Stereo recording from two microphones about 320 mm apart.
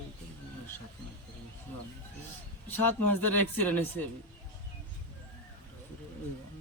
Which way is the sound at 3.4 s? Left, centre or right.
Centre.